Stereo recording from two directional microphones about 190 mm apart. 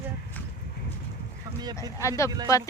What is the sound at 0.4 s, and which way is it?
Horse, 10° left (ahead or behind).